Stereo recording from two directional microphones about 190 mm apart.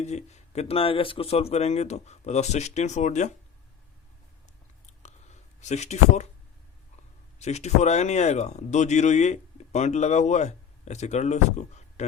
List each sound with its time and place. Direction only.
0.0 s speech: 35° left (ahead or behind)
4.9 s a sound: 40° left (ahead or behind)
7.3 s speech: 35° left (ahead or behind)